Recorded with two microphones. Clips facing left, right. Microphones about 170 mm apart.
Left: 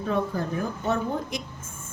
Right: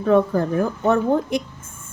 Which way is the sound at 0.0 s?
55° right (ahead or behind).